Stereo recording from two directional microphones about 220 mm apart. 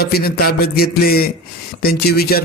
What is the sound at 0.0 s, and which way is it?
A man's voice, 45° left (ahead or behind).